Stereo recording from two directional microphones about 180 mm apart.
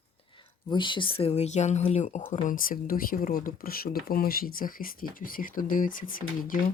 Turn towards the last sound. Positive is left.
turn(degrees=50)  # may be behind; listen again after turning